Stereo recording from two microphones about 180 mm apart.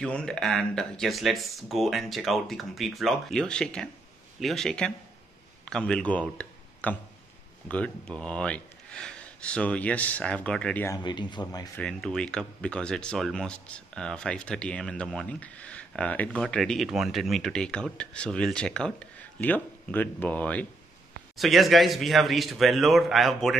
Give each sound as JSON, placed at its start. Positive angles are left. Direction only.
{"t": 0.0, "sound": "speech", "side_deg": 5}
{"t": 11.0, "sound": "speech", "side_deg": 25}
{"t": 11.8, "sound": "speech", "side_deg": 5}